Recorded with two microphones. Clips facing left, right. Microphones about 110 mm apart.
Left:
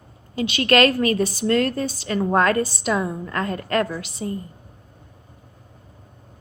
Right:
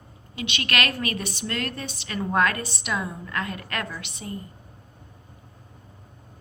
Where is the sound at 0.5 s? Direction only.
30° left (ahead or behind).